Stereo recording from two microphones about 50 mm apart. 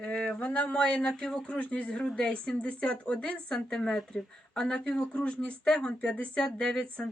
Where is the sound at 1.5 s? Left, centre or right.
Left.